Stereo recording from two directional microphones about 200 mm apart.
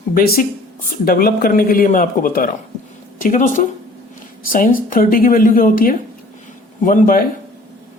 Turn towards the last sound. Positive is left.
turn(degrees=40)  # may be behind; listen again after turning